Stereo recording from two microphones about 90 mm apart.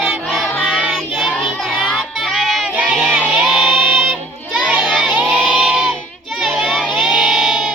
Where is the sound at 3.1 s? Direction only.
10° right (ahead or behind).